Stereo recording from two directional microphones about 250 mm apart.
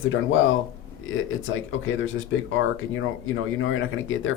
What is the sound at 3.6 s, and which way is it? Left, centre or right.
Speech, left.